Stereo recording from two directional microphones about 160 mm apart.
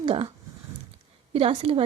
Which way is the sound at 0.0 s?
35° right (ahead or behind).